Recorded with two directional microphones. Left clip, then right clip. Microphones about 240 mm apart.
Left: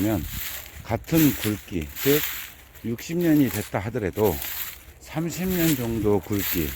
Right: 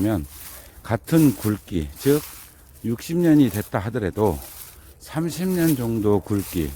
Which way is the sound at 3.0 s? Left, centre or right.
Right.